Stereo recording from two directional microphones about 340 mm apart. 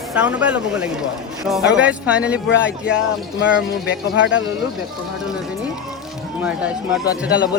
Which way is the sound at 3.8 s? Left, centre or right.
Left.